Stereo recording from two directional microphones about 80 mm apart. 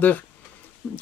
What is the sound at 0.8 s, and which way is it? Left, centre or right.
Speech, centre.